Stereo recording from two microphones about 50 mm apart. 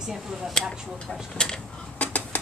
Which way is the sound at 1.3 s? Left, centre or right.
Centre.